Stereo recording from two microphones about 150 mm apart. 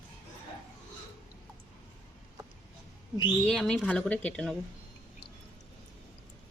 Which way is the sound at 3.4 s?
5° left (ahead or behind).